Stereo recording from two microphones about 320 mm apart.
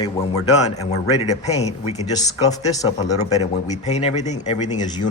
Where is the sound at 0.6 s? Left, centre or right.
Left.